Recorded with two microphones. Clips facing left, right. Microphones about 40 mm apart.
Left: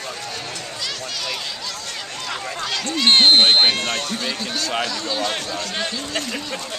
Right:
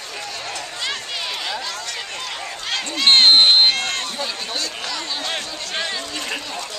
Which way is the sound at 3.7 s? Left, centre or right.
Centre.